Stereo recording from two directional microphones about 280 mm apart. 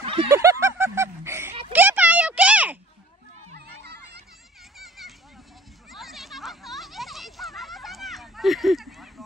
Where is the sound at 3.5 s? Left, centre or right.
Right.